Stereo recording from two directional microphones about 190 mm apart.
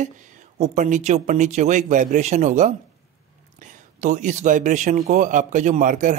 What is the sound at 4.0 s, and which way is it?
Speech, 40° right (ahead or behind).